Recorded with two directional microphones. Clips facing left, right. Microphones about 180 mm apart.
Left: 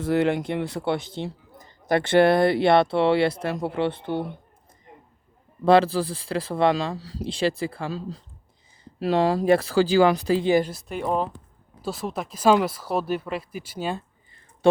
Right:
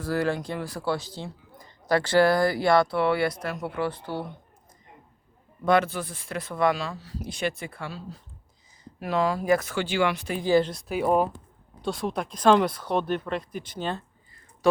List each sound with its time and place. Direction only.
0.0 s speech: 25° left (ahead or behind)
5.6 s speech: 30° left (ahead or behind)
10.4 s speech: 15° left (ahead or behind)
10.7 s speech: centre (ahead or behind)
11.8 s speech: 5° left (ahead or behind)
14.6 s a sound: 30° left (ahead or behind)